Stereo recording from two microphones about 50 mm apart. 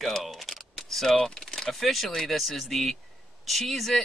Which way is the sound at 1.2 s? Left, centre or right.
Centre.